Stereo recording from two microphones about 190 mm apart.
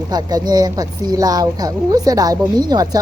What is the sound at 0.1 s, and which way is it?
Speech, 20° right (ahead or behind).